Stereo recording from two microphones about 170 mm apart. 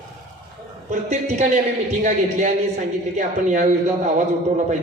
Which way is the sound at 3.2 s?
45° right (ahead or behind).